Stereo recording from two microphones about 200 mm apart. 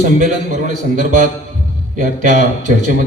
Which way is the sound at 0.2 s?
40° right (ahead or behind).